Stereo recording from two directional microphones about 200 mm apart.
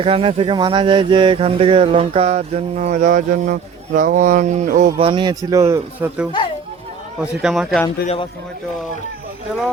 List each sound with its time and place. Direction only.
0.0 s speech: 30° right (ahead or behind)
4.9 s speech: 25° right (ahead or behind)
7.4 s speech: centre (ahead or behind)
9.5 s speech: centre (ahead or behind)